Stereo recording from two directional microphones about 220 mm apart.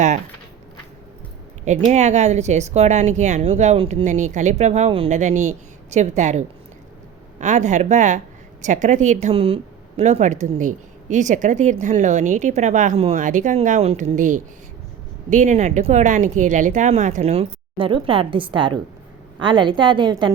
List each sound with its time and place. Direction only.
1.9 s a woman's voice: 30° right (ahead or behind)